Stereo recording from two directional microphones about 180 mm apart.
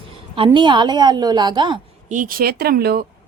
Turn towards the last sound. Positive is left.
turn(degrees=-60)  # may be behind; listen again after turning